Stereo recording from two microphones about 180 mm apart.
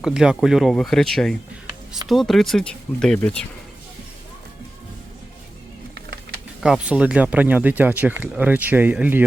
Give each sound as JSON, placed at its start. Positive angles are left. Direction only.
{"t": 0.0, "sound": "speech", "side_deg": -5}
{"t": 5.9, "sound": "music", "side_deg": -65}
{"t": 6.6, "sound": "speech", "side_deg": -5}